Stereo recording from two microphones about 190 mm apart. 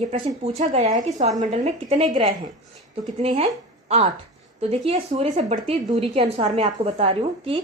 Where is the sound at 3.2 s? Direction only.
30° right (ahead or behind).